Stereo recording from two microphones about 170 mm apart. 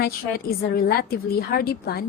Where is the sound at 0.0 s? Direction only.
60° left (ahead or behind).